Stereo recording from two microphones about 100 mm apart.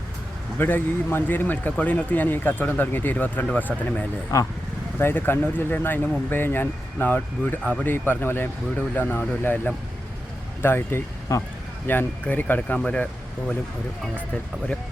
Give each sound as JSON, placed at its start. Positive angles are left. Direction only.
{"t": 0.6, "sound": "a man's voice", "side_deg": 20}
{"t": 4.9, "sound": "a man's voice", "side_deg": 20}
{"t": 11.9, "sound": "speech", "side_deg": 20}